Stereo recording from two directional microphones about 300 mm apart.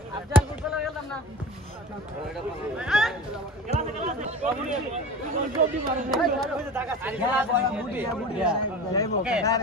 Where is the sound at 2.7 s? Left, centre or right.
Centre.